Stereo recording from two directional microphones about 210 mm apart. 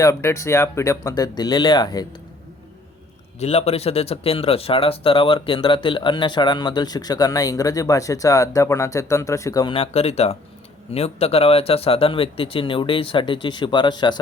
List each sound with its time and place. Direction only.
0.0 s speech: 15° left (ahead or behind)
3.4 s speech: 30° left (ahead or behind)